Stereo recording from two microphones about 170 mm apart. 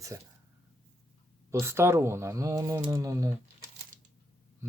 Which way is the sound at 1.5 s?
15° right (ahead or behind).